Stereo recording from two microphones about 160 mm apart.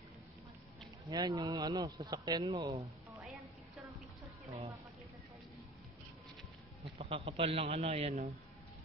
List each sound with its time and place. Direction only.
1.0 s a man's voice: 25° right (ahead or behind)
7.0 s a man's voice: 35° right (ahead or behind)